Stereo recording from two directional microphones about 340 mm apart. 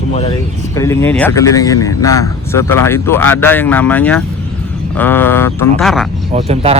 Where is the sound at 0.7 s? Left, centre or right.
Centre.